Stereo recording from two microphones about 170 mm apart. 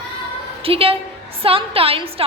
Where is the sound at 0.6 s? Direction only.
35° right (ahead or behind).